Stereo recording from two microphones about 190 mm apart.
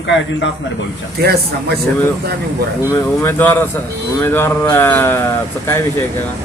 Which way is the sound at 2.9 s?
10° left (ahead or behind).